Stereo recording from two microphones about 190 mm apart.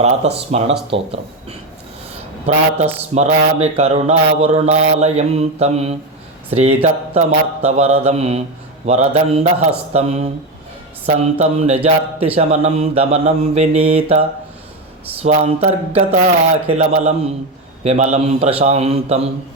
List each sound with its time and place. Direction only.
0.0 s speech: 35° right (ahead or behind)
3.2 s speech: 35° right (ahead or behind)